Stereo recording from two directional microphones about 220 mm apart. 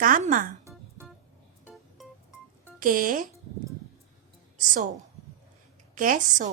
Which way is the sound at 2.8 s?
40° right (ahead or behind).